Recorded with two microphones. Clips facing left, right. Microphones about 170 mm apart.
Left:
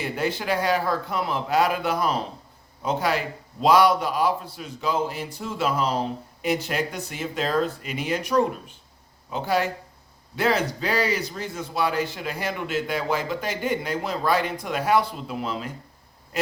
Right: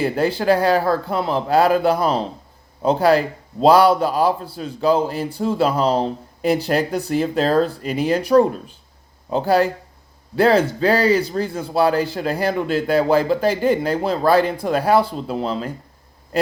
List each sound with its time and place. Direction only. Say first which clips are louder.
0.0 s a man's voice: right 8 dB; 35° right (ahead or behind)